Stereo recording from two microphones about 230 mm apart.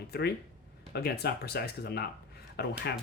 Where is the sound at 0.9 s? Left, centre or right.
Left.